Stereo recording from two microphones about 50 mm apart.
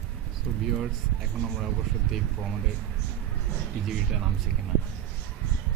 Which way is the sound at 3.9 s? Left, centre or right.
Centre.